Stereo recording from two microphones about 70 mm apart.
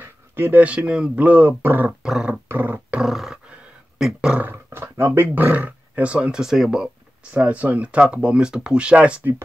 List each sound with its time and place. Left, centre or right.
0.0 s a sound: right
0.7 s speech: centre; by 1.9 s right
1.9 s speech: centre
2.4 s dog: right
3.0 s roar: centre
4.0 s speech: centre
4.6 s speech: right; by 6.9 s centre
7.3 s speech: right